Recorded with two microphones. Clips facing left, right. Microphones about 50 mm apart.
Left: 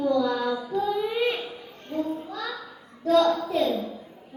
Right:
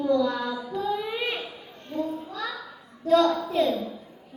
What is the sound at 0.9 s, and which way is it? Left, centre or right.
Child singing, centre.